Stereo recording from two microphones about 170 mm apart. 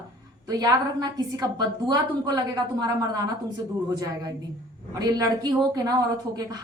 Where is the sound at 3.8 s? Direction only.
20° right (ahead or behind).